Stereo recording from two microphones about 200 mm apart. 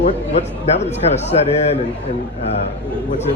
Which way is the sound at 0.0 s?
35° left (ahead or behind).